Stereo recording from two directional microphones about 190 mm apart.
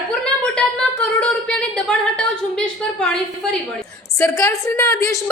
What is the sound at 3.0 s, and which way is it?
Speech, 5° left (ahead or behind).